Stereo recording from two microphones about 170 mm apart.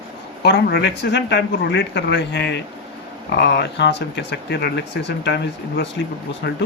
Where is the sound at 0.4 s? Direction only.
80° left.